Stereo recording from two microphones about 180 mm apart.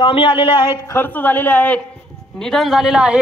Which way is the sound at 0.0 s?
30° left (ahead or behind).